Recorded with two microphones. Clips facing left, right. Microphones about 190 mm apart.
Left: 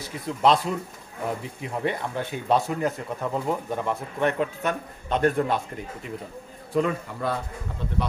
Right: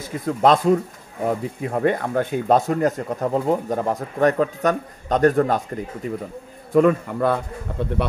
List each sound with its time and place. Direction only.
0.0 s speech: 50° right (ahead or behind)
6.7 s a man's voice: 55° right (ahead or behind)